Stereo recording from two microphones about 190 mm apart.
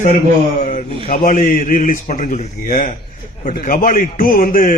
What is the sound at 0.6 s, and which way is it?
A man's voice, 40° left (ahead or behind).